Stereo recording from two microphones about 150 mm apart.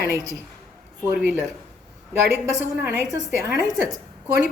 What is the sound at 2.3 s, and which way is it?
A woman's voice, 15° right (ahead or behind).